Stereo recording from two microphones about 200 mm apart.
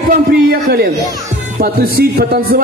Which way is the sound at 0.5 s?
50° right (ahead or behind).